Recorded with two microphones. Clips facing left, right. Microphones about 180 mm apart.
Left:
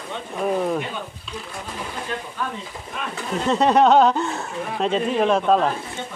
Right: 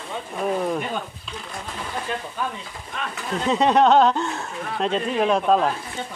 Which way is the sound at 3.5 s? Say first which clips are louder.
Left 1 dB; centre (ahead or behind).